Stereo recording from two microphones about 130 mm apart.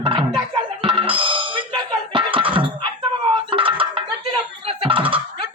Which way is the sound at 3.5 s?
40° right (ahead or behind).